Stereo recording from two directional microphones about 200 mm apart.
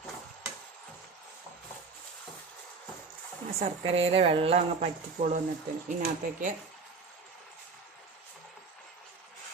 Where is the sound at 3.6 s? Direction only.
30° right (ahead or behind).